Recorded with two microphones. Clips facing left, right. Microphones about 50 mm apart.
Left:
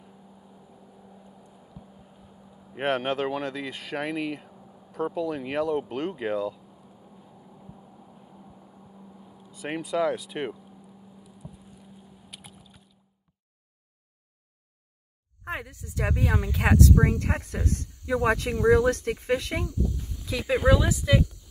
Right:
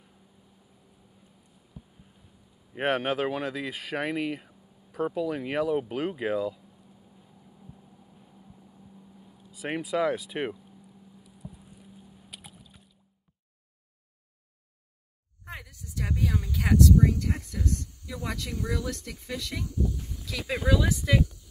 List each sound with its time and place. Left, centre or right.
0.5 s vehicle: left
1.3 s boat: left
2.4 s vehicle: left
2.7 s speech: centre
4.6 s a sound: left
4.9 s speech: centre
6.6 s vehicle: left
9.4 s speech: centre
11.2 s boat: centre
15.4 s speech: left
20.4 s speech: centre
20.9 s speech: centre